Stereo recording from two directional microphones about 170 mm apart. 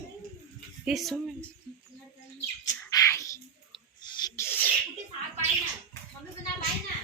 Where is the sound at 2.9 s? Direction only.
20° left (ahead or behind).